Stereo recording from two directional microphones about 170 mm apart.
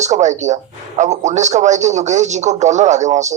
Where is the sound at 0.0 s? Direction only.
45° right (ahead or behind).